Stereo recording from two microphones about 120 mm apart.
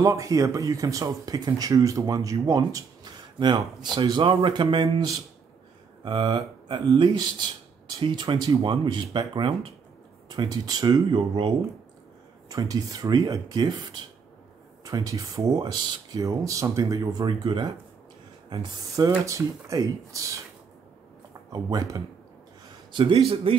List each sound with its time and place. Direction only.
0.0 s speech: 30° right (ahead or behind); by 4.8 s 45° right (ahead or behind)
6.0 s speech: 45° right (ahead or behind)
12.4 s speech: 30° right (ahead or behind)
22.9 s a man's voice: 45° right (ahead or behind)